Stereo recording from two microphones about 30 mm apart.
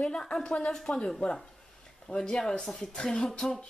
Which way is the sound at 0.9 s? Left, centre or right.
Left.